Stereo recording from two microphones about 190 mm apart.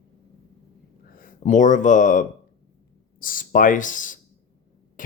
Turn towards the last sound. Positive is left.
turn(degrees=45)  # may be behind; listen again after turning